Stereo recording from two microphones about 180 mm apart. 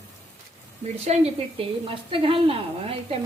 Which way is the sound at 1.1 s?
35° right (ahead or behind).